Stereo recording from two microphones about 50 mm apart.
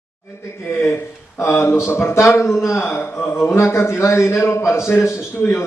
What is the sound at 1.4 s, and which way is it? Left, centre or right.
Speech, left.